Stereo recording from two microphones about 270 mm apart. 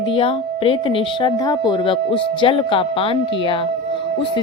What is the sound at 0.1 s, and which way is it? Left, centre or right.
A woman's voice, centre.